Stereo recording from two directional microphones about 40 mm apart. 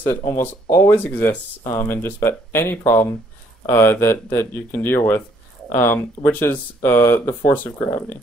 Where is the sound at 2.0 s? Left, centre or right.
Left.